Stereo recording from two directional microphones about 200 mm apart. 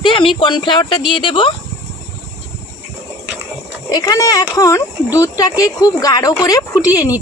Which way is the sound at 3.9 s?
20° left (ahead or behind).